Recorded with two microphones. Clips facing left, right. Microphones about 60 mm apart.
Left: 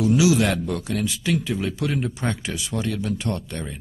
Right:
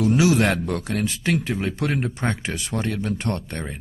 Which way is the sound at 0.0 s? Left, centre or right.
Right.